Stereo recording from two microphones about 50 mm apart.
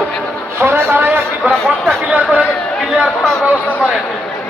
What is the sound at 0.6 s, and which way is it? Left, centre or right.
Speech, right.